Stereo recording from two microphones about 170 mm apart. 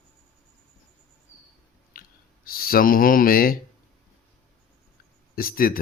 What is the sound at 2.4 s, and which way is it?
Speech, 60° left (ahead or behind).